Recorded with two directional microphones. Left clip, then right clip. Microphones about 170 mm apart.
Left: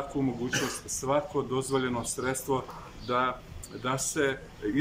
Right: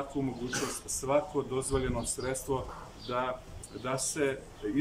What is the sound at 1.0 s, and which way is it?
Speech, 5° right (ahead or behind).